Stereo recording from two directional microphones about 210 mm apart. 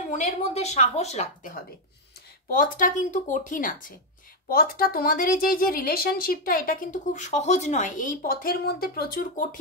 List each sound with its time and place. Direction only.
0.1 s a woman's voice: 30° left (ahead or behind)